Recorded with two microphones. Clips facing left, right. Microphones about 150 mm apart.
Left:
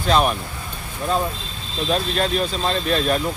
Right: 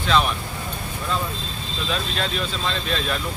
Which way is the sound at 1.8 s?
40° left (ahead or behind).